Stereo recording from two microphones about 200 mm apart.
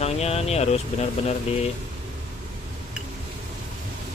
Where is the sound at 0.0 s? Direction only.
30° left (ahead or behind).